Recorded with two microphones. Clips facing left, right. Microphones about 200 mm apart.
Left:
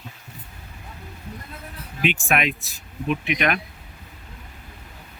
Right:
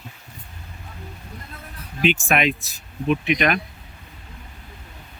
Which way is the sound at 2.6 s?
Centre (ahead or behind).